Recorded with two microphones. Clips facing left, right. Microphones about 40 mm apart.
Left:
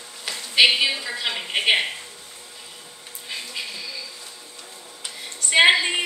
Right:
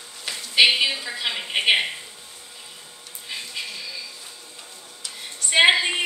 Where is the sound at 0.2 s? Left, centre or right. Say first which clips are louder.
Even; centre.